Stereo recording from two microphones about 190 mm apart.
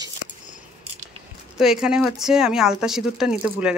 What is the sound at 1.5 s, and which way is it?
Speech, 5° right (ahead or behind).